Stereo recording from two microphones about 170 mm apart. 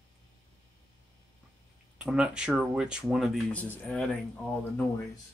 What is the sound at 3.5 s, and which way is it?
Speech, 10° left (ahead or behind).